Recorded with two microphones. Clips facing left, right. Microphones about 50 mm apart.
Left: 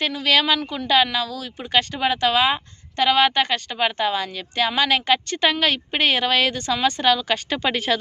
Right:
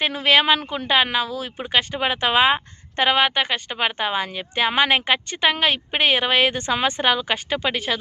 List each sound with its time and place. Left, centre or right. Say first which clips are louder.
0.1 s speech: right 3 dB; right
3.2 s speech: left 1 dB; centre
7.5 s speech: left 1 dB; centre